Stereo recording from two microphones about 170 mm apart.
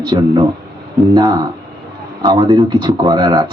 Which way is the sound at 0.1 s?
25° right (ahead or behind).